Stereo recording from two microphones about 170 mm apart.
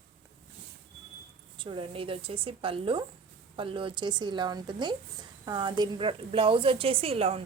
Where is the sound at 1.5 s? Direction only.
30° right (ahead or behind).